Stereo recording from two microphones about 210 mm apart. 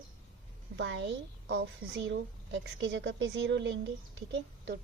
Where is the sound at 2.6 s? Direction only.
60° right (ahead or behind).